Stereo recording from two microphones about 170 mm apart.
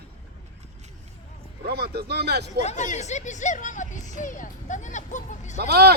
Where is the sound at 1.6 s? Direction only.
70° right (ahead or behind).